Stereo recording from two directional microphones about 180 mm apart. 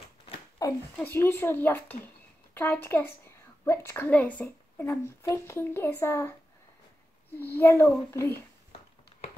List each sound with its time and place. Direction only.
0.3 s a sound: 20° left (ahead or behind)
0.9 s a woman's voice: 10° left (ahead or behind)
7.3 s speech: 10° left (ahead or behind)